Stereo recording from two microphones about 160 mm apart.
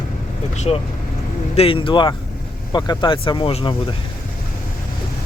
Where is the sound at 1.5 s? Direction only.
35° left (ahead or behind).